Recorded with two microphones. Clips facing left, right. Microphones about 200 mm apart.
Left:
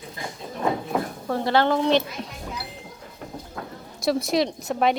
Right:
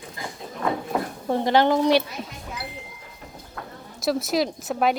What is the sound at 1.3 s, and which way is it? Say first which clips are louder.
Speech: right 2 dB; 15° right (ahead or behind).